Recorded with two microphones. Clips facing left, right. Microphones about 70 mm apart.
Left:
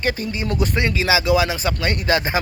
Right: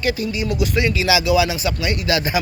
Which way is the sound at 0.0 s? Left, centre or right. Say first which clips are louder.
Right 2 dB; left.